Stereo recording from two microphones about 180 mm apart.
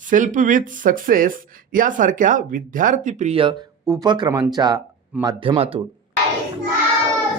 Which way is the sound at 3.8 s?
20° right (ahead or behind).